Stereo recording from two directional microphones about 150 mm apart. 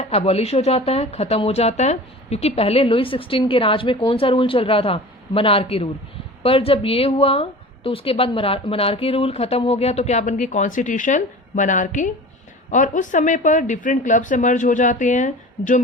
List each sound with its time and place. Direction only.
0.0 s a woman's voice: 45° left (ahead or behind)